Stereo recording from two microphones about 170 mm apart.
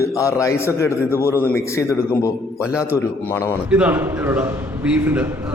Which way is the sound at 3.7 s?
5° right (ahead or behind).